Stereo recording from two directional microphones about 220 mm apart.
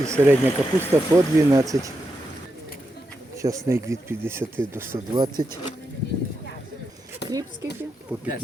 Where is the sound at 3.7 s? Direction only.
15° right (ahead or behind).